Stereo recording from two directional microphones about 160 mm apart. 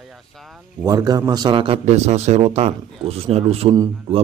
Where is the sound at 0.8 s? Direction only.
25° right (ahead or behind).